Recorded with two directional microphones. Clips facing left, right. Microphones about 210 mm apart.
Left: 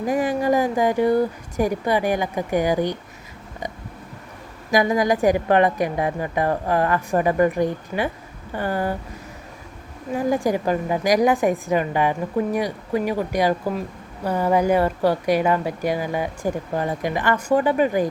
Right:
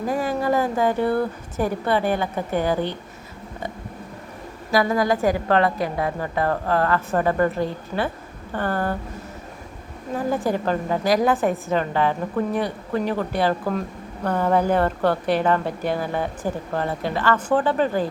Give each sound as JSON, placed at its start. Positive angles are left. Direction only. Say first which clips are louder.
{"t": 0.0, "sound": "speech", "louder": "left 2 dB", "side_deg": 15}
{"t": 4.7, "sound": "speech", "louder": "left 1 dB", "side_deg": 15}
{"t": 10.2, "sound": "speech", "louder": "left 2 dB", "side_deg": 15}